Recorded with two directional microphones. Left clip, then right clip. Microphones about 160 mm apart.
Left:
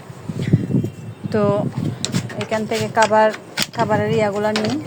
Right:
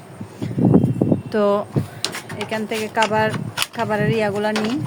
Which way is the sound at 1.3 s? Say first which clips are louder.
Even; 15° right (ahead or behind).